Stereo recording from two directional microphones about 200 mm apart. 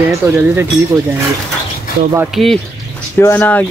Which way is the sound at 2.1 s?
5° right (ahead or behind).